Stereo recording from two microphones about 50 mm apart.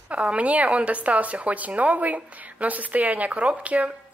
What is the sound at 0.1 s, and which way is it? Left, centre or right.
Speech, right.